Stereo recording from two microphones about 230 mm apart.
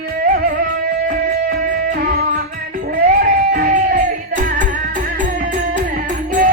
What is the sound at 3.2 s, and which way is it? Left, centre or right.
Music, right.